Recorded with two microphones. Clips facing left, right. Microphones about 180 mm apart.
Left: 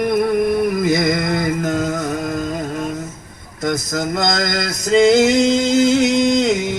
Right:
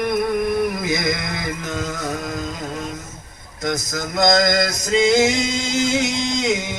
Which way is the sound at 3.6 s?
55° left (ahead or behind).